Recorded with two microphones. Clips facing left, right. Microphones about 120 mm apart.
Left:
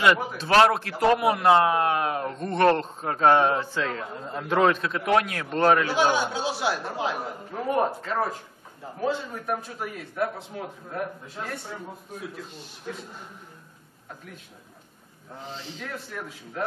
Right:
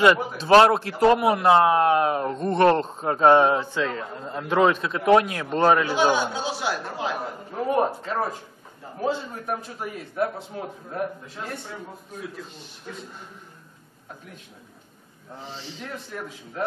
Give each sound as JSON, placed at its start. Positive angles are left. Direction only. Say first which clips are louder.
{"t": 0.4, "sound": "a man's voice", "louder": "right 5 dB", "side_deg": -30}
{"t": 3.5, "sound": "a man's voice", "louder": "right 2 dB", "side_deg": 0}
{"t": 4.8, "sound": "a man's voice", "louder": "right 5 dB", "side_deg": -20}
{"t": 5.9, "sound": "a man's voice", "louder": "right 1 dB", "side_deg": 0}
{"t": 9.5, "sound": "a man's voice", "louder": "even", "side_deg": 0}
{"t": 10.1, "sound": "a man's voice", "louder": "right 2 dB", "side_deg": -30}
{"t": 11.5, "sound": "a man's voice", "louder": "even", "side_deg": 5}
{"t": 15.8, "sound": "a man's voice", "louder": "right 2 dB", "side_deg": 0}